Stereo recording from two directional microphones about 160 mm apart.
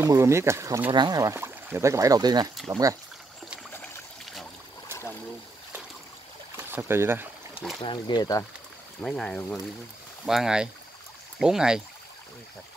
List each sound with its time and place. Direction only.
0.0 s speech: 15° right (ahead or behind)
3.7 s trickle: 15° left (ahead or behind)
6.5 s speech: 15° right (ahead or behind)
7.8 s speech: 30° left (ahead or behind)
9.0 s speech: 5° left (ahead or behind)